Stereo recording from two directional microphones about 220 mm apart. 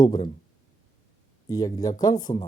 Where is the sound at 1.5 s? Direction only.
15° left (ahead or behind).